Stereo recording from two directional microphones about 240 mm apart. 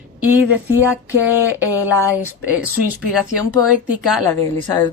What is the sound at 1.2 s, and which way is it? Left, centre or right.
Speech, centre.